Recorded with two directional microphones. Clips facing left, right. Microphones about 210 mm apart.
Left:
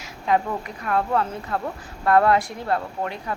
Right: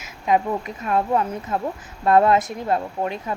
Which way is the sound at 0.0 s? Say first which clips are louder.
Right 2 dB; 20° right (ahead or behind).